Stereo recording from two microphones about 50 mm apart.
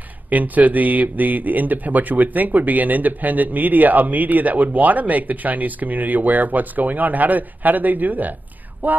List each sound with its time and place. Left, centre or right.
0.3 s speech: right